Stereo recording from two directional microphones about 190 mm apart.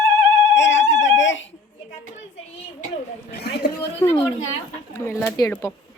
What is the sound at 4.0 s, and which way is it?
Speech, 15° left (ahead or behind).